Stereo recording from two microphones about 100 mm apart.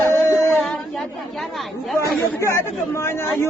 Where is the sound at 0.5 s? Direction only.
Centre (ahead or behind).